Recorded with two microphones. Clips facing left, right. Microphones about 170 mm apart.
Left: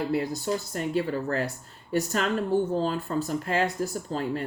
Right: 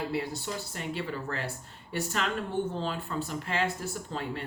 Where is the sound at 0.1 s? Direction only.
40° left (ahead or behind).